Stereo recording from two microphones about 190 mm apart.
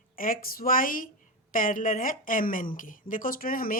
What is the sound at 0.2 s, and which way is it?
Speech, 50° left (ahead or behind).